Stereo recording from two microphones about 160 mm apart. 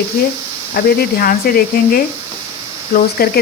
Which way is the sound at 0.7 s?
75° left (ahead or behind).